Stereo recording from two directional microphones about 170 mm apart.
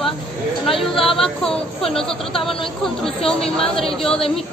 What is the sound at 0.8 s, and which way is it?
Speech, centre (ahead or behind).